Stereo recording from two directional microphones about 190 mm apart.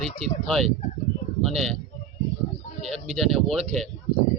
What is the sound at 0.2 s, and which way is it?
Speech, centre (ahead or behind).